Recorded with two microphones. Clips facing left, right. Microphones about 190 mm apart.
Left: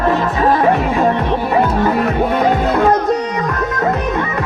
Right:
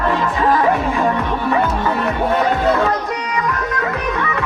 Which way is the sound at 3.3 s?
45° left (ahead or behind).